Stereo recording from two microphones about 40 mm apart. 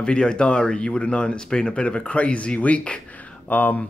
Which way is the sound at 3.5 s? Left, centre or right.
Left.